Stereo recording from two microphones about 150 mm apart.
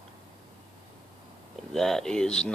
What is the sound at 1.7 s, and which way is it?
Speech, centre (ahead or behind).